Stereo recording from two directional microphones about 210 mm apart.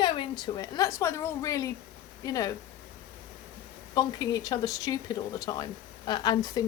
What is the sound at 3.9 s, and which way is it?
A woman's voice, 15° left (ahead or behind).